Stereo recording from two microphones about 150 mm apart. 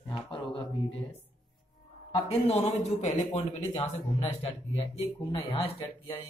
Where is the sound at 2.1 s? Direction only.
45° left (ahead or behind).